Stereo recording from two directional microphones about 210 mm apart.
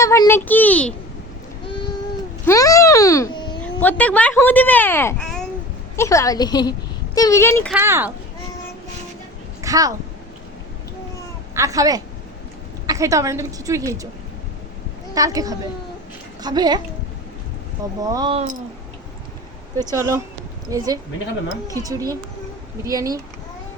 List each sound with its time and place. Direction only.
0.0 s speech: 15° left (ahead or behind)
2.5 s a child's voice: 15° left (ahead or behind)
3.6 s speech: 5° left (ahead or behind)
7.7 s a woman's voice: 10° right (ahead or behind)
9.6 s a sound: 15° right (ahead or behind)
11.5 s a woman's voice: 15° right (ahead or behind)
15.1 s a woman's voice: 15° right (ahead or behind)
18.0 s a woman's voice: 20° right (ahead or behind)
19.8 s a woman's voice: 15° right (ahead or behind)